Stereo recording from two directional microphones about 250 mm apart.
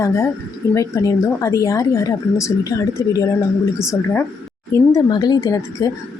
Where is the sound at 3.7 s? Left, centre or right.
Centre.